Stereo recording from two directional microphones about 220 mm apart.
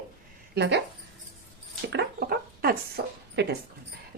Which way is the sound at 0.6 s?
50° right (ahead or behind).